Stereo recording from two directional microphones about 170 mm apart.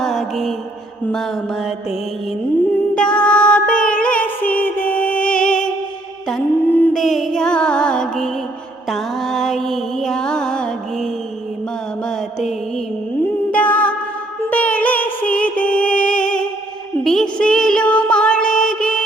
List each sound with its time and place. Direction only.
0.0 s mantra: centre (ahead or behind)
2.9 s music: 5° left (ahead or behind)
13.5 s music: 10° left (ahead or behind)